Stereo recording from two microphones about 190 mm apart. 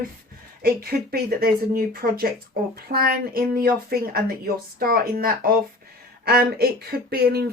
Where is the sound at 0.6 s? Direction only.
55° right (ahead or behind).